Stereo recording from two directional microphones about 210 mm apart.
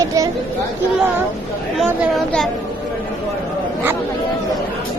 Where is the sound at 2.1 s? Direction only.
Centre (ahead or behind).